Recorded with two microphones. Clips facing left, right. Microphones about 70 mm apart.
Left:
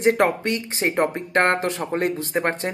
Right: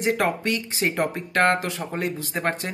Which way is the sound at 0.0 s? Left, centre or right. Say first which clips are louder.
Left 4 dB; left.